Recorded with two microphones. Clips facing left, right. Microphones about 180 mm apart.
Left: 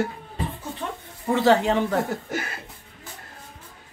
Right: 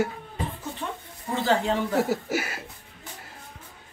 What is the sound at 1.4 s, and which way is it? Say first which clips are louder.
Speech: left 5 dB; 70° left (ahead or behind).